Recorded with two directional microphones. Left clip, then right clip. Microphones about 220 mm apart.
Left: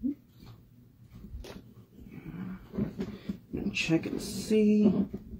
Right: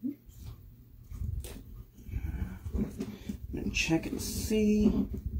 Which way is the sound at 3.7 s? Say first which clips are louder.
Left 1 dB; 15° right (ahead or behind).